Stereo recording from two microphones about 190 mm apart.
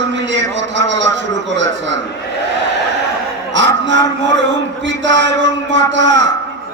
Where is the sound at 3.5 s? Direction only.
70° right (ahead or behind).